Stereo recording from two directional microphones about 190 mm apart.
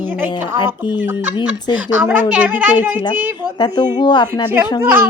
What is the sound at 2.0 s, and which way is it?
A child's voice, 5° right (ahead or behind).